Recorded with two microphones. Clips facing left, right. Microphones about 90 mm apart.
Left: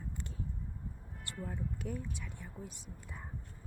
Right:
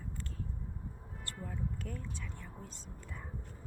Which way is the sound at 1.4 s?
15° left (ahead or behind).